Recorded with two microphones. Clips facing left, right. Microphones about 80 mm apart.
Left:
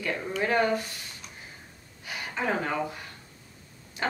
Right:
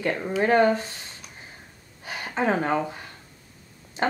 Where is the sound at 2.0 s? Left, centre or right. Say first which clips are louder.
Right 5 dB; right.